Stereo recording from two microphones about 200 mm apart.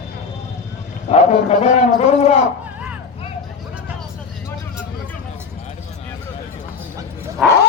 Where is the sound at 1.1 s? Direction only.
35° left (ahead or behind).